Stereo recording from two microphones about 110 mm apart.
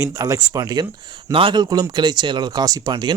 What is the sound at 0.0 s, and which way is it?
Speech, 30° right (ahead or behind).